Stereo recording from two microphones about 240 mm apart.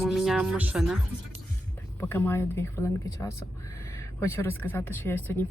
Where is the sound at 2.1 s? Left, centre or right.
Centre.